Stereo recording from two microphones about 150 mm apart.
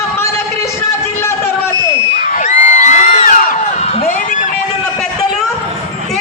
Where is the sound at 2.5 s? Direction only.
55° left (ahead or behind).